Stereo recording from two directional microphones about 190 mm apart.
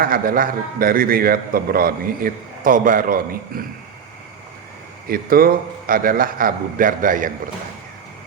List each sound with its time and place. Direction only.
0.0 s a man's voice: 50° right (ahead or behind)
5.0 s a man's voice: 50° right (ahead or behind)